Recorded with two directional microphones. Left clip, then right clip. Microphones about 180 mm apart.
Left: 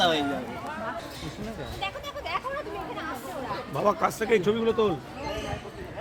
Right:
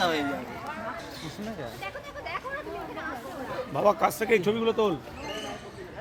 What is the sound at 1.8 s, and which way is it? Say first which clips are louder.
Speech: left 4 dB; 45° left (ahead or behind).